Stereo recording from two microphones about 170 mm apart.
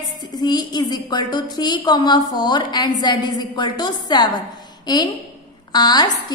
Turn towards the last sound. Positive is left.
turn(degrees=20)  # may be behind; listen again after turning